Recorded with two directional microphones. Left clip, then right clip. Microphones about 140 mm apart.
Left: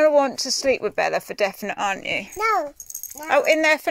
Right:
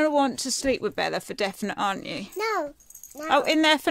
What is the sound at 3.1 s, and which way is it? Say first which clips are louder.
Child singing: left 4 dB; 30° right (ahead or behind).